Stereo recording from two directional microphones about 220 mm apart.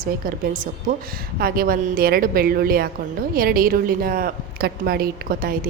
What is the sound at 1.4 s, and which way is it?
A woman's voice, 40° right (ahead or behind).